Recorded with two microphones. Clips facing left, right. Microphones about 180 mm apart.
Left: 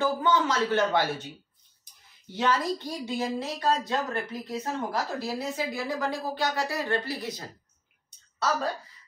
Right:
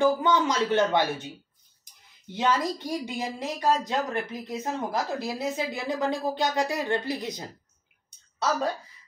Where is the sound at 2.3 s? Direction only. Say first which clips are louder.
Right 1 dB; 15° right (ahead or behind).